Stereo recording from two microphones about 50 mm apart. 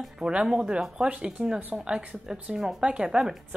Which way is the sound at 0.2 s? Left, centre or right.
Centre.